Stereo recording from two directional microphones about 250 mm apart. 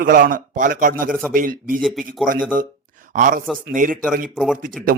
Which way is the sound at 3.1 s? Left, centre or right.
Right.